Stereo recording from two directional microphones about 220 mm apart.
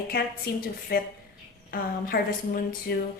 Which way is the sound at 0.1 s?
45° left (ahead or behind).